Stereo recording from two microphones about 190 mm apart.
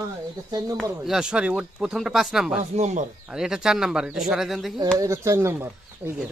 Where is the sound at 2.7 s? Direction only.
40° right (ahead or behind).